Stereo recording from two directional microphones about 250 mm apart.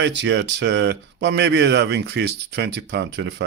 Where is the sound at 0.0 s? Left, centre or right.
Right.